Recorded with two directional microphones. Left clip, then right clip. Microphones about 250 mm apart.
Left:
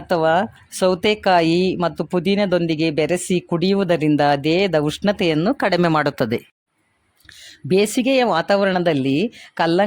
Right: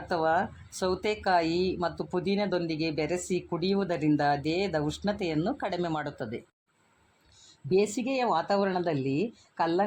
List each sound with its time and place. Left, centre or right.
0.1 s speech: left
7.4 s speech: left